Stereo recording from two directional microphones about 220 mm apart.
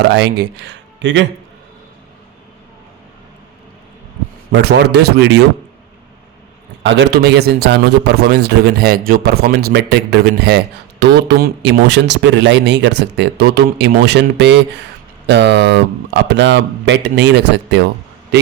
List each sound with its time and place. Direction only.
0.1 s a man's voice: 50° right (ahead or behind)
4.5 s a man's voice: 50° right (ahead or behind)
6.8 s a man's voice: 55° right (ahead or behind)